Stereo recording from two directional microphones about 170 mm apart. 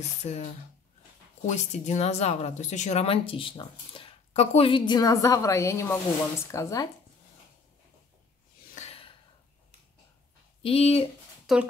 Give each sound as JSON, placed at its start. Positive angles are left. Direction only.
{"t": 0.2, "sound": "speech", "side_deg": 40}
{"t": 1.5, "sound": "speech", "side_deg": 40}
{"t": 8.7, "sound": "gasp", "side_deg": 35}
{"t": 10.6, "sound": "speech", "side_deg": 35}
{"t": 11.5, "sound": "speech", "side_deg": 0}